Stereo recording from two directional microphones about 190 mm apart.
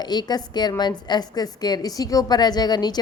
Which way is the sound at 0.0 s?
20° left (ahead or behind).